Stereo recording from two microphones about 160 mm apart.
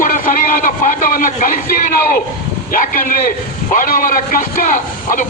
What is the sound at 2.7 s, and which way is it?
A man's voice, 60° left (ahead or behind).